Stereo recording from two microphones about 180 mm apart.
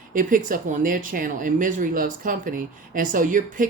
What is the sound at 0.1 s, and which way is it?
Speech, 50° right (ahead or behind).